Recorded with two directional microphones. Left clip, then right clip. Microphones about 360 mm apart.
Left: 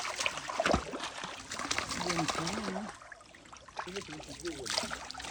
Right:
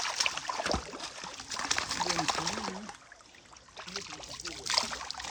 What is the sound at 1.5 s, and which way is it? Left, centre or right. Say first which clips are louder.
Water: right 3 dB; centre.